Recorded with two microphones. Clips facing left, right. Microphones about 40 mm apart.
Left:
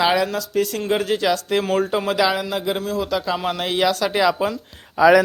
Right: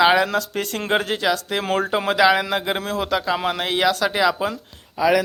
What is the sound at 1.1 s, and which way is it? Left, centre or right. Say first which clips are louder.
Speech: left 2 dB; centre.